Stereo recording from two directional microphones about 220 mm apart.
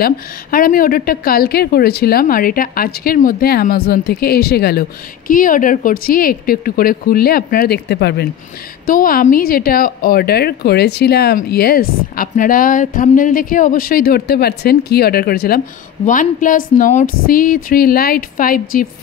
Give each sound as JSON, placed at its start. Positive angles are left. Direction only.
{"t": 0.0, "sound": "a woman's voice", "side_deg": 40}